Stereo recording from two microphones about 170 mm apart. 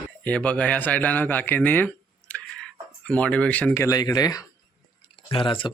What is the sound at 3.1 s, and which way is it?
Speech, 5° left (ahead or behind).